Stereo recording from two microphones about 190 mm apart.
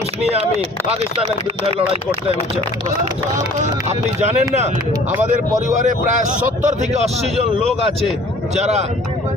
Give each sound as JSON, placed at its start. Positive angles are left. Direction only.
{"t": 3.6, "sound": "speech", "side_deg": -35}